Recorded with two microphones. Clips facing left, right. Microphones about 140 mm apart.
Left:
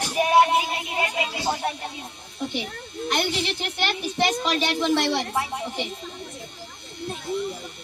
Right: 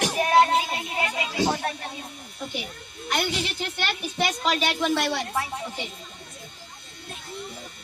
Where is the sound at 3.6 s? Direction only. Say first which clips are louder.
Left 3 dB; 20° left (ahead or behind).